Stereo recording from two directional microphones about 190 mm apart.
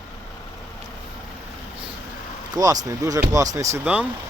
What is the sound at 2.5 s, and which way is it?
Speech, 20° right (ahead or behind).